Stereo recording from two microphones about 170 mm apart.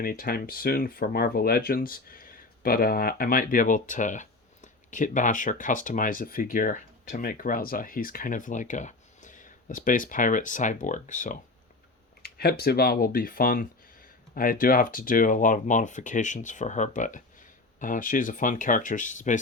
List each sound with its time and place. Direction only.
0.0 s speech: 60° left (ahead or behind)
12.2 s speech: 65° left (ahead or behind); by 19.4 s 45° left (ahead or behind)